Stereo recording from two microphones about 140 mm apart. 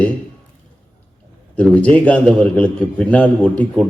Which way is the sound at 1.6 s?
10° left (ahead or behind).